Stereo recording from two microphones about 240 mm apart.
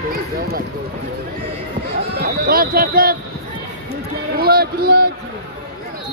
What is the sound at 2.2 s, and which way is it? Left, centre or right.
Speech, right.